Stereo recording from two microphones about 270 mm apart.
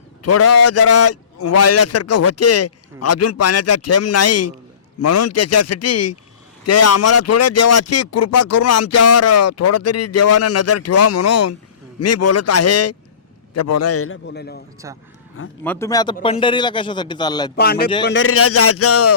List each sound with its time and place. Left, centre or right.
0.2 s a man's voice: left
14.8 s speech: centre
15.6 s a man's voice: centre
17.6 s a man's voice: left